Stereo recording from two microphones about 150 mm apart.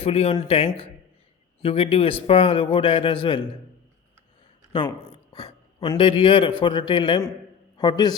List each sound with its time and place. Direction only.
0.0 s a man's voice: 40° left (ahead or behind)
4.7 s a sound: 35° left (ahead or behind)
5.9 s a man's voice: 35° left (ahead or behind)